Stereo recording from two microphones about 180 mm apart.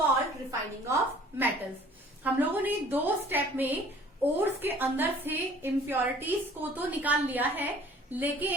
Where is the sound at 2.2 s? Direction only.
10° right (ahead or behind).